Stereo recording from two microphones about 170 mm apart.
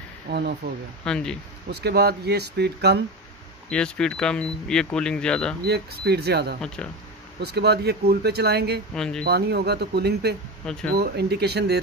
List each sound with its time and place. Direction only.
0.3 s speech: 75° right (ahead or behind)
1.0 s speech: 5° left (ahead or behind)
1.7 s speech: 75° right (ahead or behind)
3.7 s speech: 5° left (ahead or behind)
5.7 s speech: 70° right (ahead or behind)
8.9 s speech: 5° left (ahead or behind)
9.2 s speech: 70° right (ahead or behind)
10.6 s speech: 5° left (ahead or behind)
11.0 s speech: 70° right (ahead or behind)